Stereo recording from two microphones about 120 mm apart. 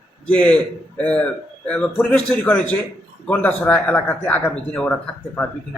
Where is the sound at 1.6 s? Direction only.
10° left (ahead or behind).